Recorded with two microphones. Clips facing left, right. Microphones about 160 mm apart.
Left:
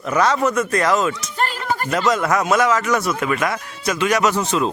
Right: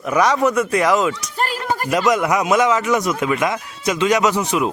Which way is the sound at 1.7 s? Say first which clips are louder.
Right 2 dB; 15° right (ahead or behind).